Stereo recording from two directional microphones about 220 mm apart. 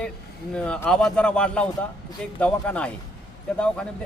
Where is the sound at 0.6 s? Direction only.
5° left (ahead or behind).